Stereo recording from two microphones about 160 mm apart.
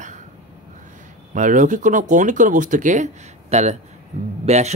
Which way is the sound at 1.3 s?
50° right (ahead or behind).